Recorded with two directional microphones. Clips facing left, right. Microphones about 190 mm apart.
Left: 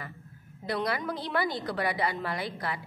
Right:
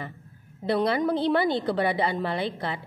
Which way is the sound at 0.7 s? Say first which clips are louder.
Right 7 dB; 25° right (ahead or behind).